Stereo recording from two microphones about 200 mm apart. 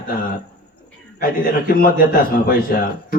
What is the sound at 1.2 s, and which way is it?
A man's voice, 45° left (ahead or behind).